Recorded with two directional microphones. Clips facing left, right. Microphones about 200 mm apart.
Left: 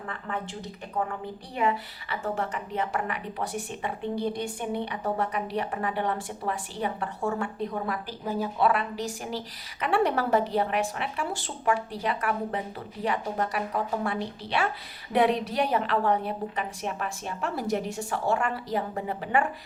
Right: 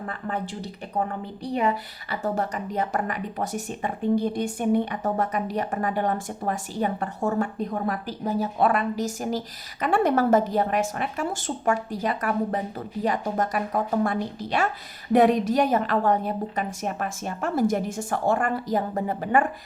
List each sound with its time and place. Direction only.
0.1 s speech: 35° right (ahead or behind)